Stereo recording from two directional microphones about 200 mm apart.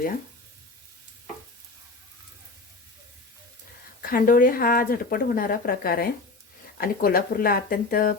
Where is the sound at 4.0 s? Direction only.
45° left (ahead or behind).